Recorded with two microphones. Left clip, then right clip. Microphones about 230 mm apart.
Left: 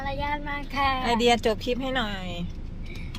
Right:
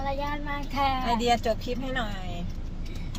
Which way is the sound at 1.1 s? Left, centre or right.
Left.